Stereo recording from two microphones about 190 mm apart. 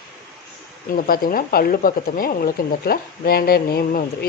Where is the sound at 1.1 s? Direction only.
50° left (ahead or behind).